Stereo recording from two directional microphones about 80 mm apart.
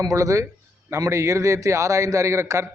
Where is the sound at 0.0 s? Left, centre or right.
Right.